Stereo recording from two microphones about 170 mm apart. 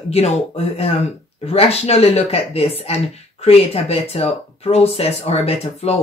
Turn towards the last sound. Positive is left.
turn(degrees=35)  # may be behind; listen again after turning